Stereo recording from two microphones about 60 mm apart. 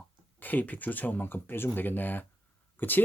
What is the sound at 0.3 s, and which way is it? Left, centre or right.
Speech, left.